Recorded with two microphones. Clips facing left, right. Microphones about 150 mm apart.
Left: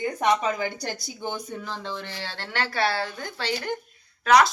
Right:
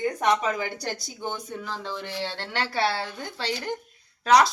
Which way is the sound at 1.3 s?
Centre (ahead or behind).